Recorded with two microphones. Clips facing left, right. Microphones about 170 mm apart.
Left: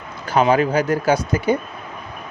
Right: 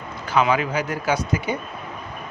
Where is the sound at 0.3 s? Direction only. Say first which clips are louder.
Left 4 dB; 40° left (ahead or behind).